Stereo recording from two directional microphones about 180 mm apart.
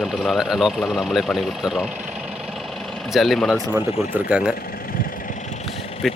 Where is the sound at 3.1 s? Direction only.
Centre (ahead or behind).